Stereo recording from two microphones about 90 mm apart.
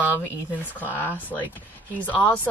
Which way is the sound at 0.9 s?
20° left (ahead or behind).